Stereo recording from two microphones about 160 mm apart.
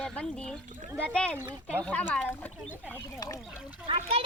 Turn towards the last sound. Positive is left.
turn(degrees=-35)  # may be behind; listen again after turning